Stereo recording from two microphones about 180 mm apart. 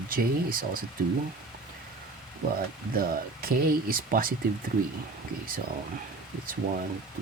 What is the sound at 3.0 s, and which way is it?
Speech, 55° right (ahead or behind).